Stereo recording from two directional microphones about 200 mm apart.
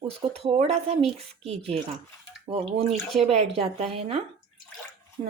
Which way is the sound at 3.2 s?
30° right (ahead or behind).